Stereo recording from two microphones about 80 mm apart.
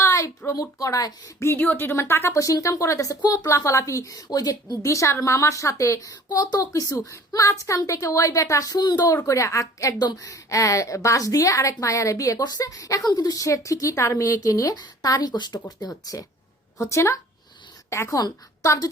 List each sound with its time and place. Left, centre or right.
0.0 s a woman's voice: left
1.5 s speech: left
1.9 s a woman's voice: left
3.2 s speech: left
3.4 s a woman's voice: left
9.2 s a woman's voice: left
15.8 s a woman's voice: left
16.8 s a woman's voice: left
18.2 s a woman's voice: left